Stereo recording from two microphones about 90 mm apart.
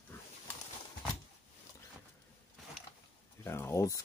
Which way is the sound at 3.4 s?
30° left (ahead or behind).